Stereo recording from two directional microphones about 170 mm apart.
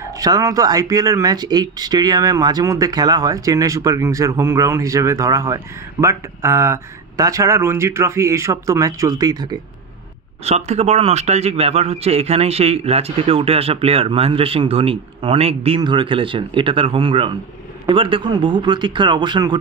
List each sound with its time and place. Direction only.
0.0 s speech: 20° right (ahead or behind)
10.4 s a man's voice: 40° right (ahead or behind)